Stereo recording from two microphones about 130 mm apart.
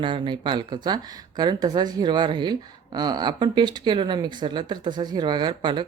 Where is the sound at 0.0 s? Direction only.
40° right (ahead or behind).